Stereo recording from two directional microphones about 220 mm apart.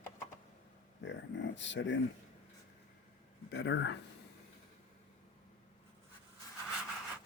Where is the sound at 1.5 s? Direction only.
55° left (ahead or behind).